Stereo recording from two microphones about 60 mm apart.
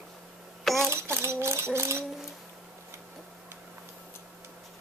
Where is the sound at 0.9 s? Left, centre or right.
Right.